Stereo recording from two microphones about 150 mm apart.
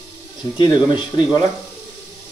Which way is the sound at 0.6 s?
30° left (ahead or behind).